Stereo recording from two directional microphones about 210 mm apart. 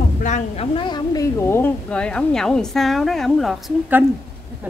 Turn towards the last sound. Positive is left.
turn(degrees=-5)  # may be behind; listen again after turning